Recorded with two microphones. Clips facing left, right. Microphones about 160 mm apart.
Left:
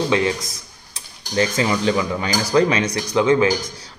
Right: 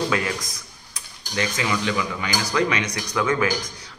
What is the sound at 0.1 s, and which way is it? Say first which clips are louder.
A man's voice: left 6 dB; 25° left (ahead or behind).